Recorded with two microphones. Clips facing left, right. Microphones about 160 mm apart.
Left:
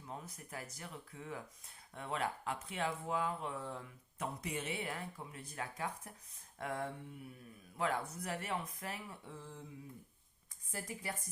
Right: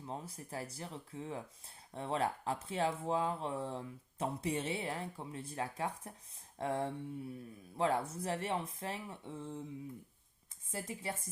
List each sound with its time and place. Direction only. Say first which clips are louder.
0.0 s speech: right 4 dB; 30° right (ahead or behind)
10.7 s speech: right 3 dB; 25° right (ahead or behind)